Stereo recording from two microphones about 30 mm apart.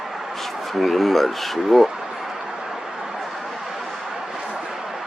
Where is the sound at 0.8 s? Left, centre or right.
Centre.